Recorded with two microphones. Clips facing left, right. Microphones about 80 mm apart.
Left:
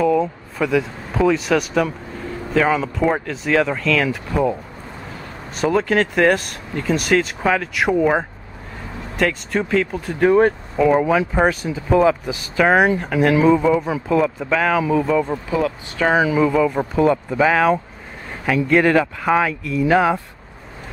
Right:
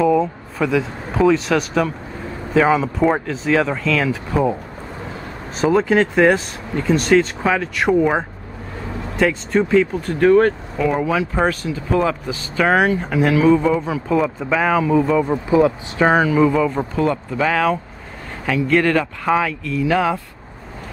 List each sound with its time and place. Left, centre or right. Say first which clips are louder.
0.0 s speech: right 1 dB; centre
5.6 s speech: right 2 dB; centre
13.0 s speech: even; centre
14.0 s speech: even; centre
15.3 s speech: right 6 dB; centre
16.1 s speech: right 1 dB; centre